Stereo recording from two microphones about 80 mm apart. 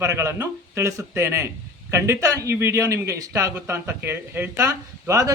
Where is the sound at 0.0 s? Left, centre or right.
Right.